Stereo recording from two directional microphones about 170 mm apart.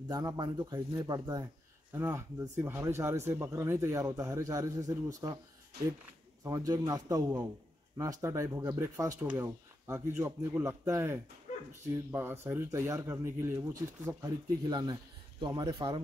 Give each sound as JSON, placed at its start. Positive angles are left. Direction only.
{"t": 0.1, "sound": "speech", "side_deg": -25}
{"t": 6.4, "sound": "a man's voice", "side_deg": -20}
{"t": 11.5, "sound": "dog", "side_deg": 45}
{"t": 12.1, "sound": "a man's voice", "side_deg": -15}